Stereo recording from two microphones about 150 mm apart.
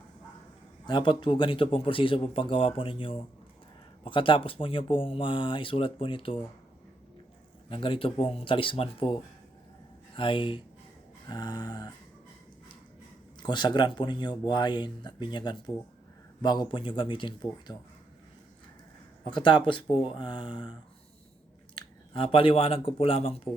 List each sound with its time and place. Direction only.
0.9 s speech: 30° left (ahead or behind)
7.7 s speech: 35° left (ahead or behind)
10.2 s speech: 35° left (ahead or behind)
13.4 s speech: 30° left (ahead or behind)
19.2 s speech: 35° left (ahead or behind)
21.8 s speech: 40° left (ahead or behind)